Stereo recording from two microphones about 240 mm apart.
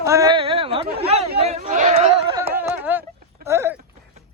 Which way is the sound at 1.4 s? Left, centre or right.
Right.